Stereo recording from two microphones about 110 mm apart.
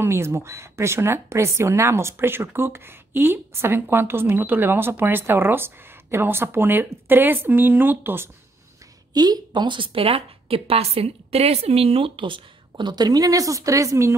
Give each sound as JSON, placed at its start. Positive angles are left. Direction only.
{"t": 0.0, "sound": "speech", "side_deg": -25}
{"t": 9.1, "sound": "a woman's voice", "side_deg": -35}